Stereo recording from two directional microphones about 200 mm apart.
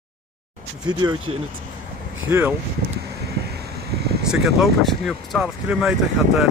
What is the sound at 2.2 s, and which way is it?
Speech, 10° right (ahead or behind).